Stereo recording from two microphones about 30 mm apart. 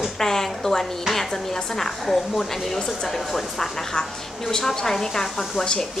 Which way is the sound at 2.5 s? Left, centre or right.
Centre.